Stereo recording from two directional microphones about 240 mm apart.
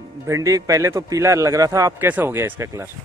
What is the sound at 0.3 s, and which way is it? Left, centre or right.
A man's voice, centre.